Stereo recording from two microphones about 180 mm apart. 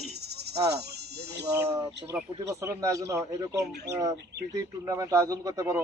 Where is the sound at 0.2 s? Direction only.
65° right (ahead or behind).